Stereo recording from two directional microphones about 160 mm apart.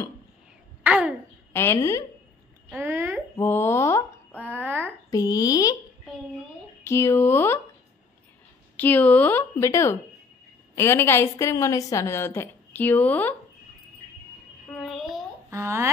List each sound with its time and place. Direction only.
0.8 s babbling: 10° right (ahead or behind)
1.5 s a woman's voice: 15° left (ahead or behind)
2.8 s a sound: 15° right (ahead or behind)
3.3 s mantra: 15° left (ahead or behind)
4.5 s a sound: 10° right (ahead or behind)
5.1 s speech: 20° left (ahead or behind)
6.8 s speech: 15° left (ahead or behind)
8.7 s a woman's voice: 10° left (ahead or behind)
14.8 s a sound: centre (ahead or behind)
15.5 s speech: 15° right (ahead or behind)